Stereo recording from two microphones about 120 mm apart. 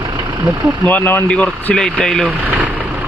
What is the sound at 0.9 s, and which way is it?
Speech, 15° left (ahead or behind).